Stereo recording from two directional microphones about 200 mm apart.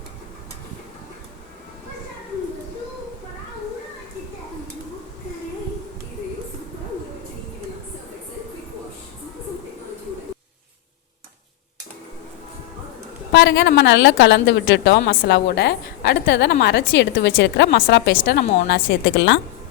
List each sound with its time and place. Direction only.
13.3 s a woman's voice: 65° left (ahead or behind)
18.2 s a woman's voice: 50° left (ahead or behind)